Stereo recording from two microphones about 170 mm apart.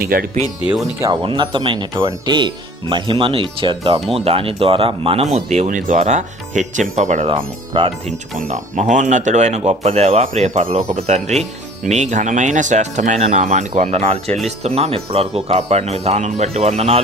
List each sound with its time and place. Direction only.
0.0 s speech: 60° right (ahead or behind)
1.0 s speech: 25° right (ahead or behind); by 7.3 s 45° right (ahead or behind)
7.3 s speech: 30° right (ahead or behind)
8.4 s speech: 45° right (ahead or behind)